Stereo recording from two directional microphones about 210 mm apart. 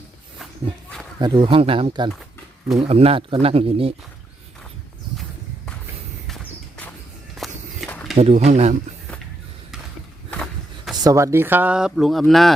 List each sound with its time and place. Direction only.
1.2 s speech: 25° right (ahead or behind)
6.2 s walk: 5° left (ahead or behind)
8.1 s speech: 30° right (ahead or behind)
10.3 s a sound: centre (ahead or behind)
10.9 s speech: 15° right (ahead or behind); by 12.5 s centre (ahead or behind)